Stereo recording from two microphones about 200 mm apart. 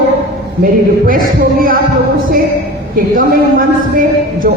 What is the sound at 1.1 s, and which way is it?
Speech, 45° right (ahead or behind).